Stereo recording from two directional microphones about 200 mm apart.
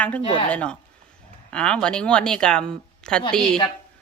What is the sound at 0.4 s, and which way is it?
Speech, 5° left (ahead or behind).